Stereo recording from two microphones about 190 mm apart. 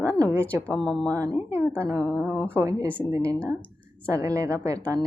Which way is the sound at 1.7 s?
10° left (ahead or behind).